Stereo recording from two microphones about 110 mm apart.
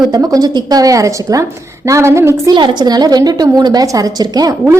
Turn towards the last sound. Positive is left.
turn(degrees=-35)  # may be behind; listen again after turning